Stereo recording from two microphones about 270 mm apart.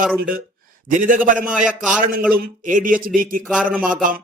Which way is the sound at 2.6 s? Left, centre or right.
Right.